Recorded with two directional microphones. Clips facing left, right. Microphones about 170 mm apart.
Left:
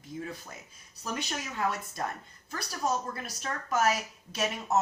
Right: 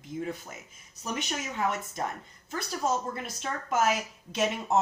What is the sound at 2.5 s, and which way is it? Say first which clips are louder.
A woman's voice: right 2 dB; 25° right (ahead or behind).